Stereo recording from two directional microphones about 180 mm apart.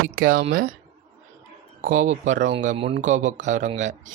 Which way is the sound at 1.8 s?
45° right (ahead or behind).